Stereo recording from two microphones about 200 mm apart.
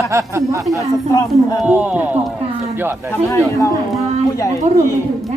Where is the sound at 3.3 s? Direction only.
15° left (ahead or behind).